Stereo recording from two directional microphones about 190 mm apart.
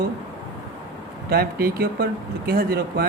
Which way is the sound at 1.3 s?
55° right (ahead or behind).